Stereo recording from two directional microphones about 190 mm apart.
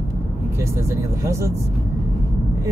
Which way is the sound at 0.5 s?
15° right (ahead or behind).